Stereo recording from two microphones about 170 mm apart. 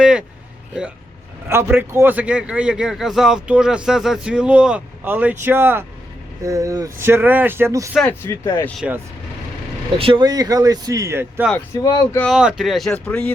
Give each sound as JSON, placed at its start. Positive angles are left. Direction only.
{"t": 0.0, "sound": "a sound", "side_deg": -5}
{"t": 1.5, "sound": "a man's voice", "side_deg": -15}
{"t": 8.2, "sound": "speech", "side_deg": 15}
{"t": 8.8, "sound": "speech", "side_deg": -5}
{"t": 10.0, "sound": "speech", "side_deg": -30}
{"t": 11.5, "sound": "speech", "side_deg": 20}
{"t": 12.3, "sound": "speech", "side_deg": -5}